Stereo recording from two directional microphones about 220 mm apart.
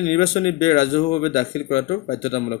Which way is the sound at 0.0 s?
25° left (ahead or behind).